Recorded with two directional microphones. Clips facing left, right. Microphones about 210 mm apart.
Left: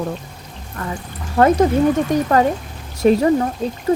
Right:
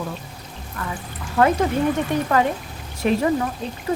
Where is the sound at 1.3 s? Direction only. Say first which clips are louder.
Left 5 dB; 40° left (ahead or behind).